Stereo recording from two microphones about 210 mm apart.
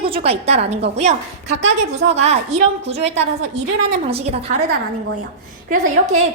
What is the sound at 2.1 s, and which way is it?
A woman's voice, 30° right (ahead or behind).